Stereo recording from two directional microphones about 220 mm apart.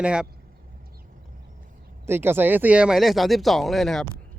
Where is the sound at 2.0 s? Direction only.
10° right (ahead or behind).